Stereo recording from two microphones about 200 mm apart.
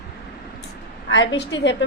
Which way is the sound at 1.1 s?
65° left (ahead or behind).